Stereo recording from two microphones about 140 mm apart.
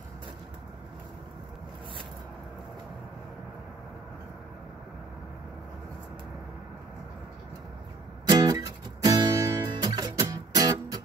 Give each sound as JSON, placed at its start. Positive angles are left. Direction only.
{"t": 8.3, "sound": "music", "side_deg": -25}